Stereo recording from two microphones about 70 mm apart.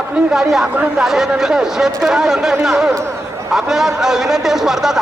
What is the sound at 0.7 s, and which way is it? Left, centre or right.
Speech, right.